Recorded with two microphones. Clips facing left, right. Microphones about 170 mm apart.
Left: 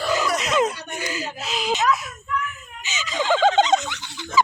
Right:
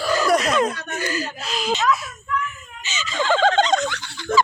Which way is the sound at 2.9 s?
15° left (ahead or behind).